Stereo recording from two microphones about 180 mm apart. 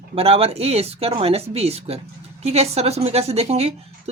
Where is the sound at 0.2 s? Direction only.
35° right (ahead or behind).